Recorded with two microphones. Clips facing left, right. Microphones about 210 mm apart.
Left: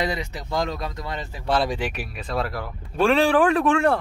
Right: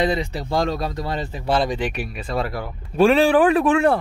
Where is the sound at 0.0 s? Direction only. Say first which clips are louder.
Right 5 dB; 30° right (ahead or behind).